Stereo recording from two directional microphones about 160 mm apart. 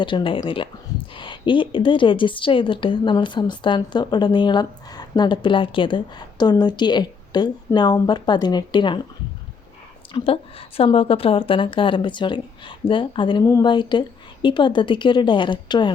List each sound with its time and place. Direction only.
0.0 s a woman's voice: 30° left (ahead or behind)
10.1 s a woman's voice: 35° left (ahead or behind)